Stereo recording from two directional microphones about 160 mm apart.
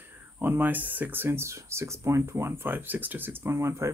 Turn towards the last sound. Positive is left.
turn(degrees=-15)  # may be behind; listen again after turning